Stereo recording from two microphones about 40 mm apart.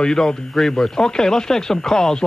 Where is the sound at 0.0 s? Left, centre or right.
Centre.